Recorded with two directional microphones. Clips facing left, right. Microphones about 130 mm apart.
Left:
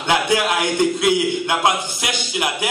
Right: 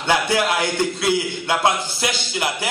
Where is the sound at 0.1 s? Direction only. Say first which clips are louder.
Left 1 dB; 15° left (ahead or behind).